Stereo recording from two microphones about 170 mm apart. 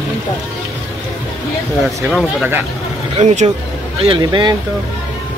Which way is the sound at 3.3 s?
40° right (ahead or behind).